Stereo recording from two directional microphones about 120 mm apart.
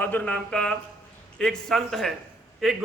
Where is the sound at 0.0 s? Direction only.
15° left (ahead or behind).